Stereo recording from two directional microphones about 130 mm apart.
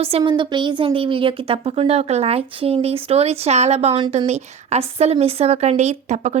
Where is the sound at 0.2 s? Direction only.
35° right (ahead or behind).